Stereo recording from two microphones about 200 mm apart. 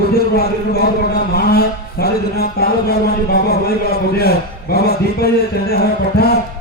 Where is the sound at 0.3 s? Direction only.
50° left (ahead or behind).